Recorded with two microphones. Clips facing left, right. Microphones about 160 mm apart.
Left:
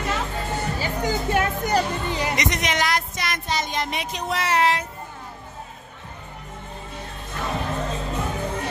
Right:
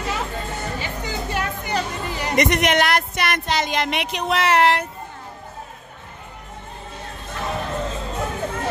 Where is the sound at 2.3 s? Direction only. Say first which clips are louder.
Right 6 dB; 60° right (ahead or behind).